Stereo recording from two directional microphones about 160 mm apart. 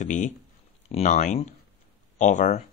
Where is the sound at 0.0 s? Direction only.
50° left (ahead or behind).